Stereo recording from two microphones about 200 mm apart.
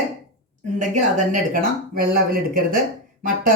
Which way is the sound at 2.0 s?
50° right (ahead or behind).